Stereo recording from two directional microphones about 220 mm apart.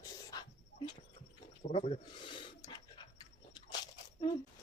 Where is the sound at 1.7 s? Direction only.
25° left (ahead or behind).